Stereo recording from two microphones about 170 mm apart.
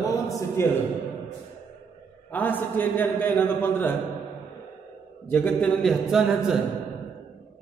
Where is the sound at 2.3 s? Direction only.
10° left (ahead or behind).